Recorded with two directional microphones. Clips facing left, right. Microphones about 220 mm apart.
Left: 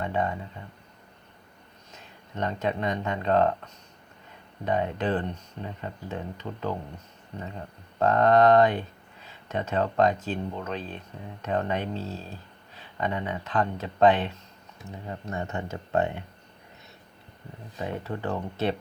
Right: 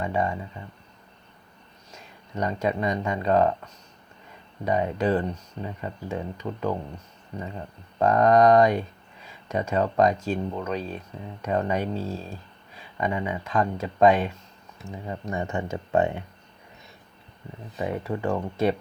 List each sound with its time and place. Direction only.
0.0 s speech: 10° right (ahead or behind)
1.9 s speech: 10° right (ahead or behind)
4.6 s speech: 10° right (ahead or behind)
7.9 s speech: 10° right (ahead or behind)
10.8 s speech: 40° right (ahead or behind)
11.4 s speech: 10° right (ahead or behind)
17.7 s speech: 10° right (ahead or behind)